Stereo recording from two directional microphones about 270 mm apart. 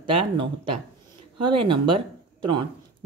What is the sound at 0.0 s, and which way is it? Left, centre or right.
Speech, centre.